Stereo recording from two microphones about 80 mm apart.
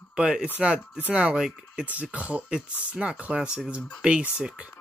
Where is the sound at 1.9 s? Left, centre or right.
Centre.